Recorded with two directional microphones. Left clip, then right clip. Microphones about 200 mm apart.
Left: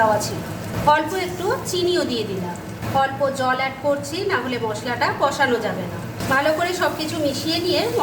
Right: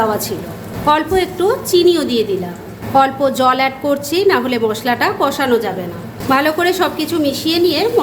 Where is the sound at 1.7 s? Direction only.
40° right (ahead or behind).